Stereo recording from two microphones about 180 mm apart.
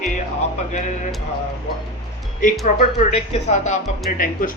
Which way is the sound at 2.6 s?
45° left (ahead or behind).